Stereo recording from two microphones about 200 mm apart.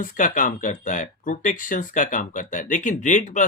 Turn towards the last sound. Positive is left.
turn(degrees=40)  # may be behind; listen again after turning